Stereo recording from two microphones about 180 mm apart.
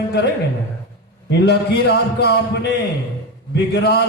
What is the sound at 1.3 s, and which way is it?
A man's voice, 65° left (ahead or behind).